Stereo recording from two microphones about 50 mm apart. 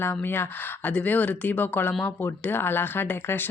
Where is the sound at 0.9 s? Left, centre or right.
Left.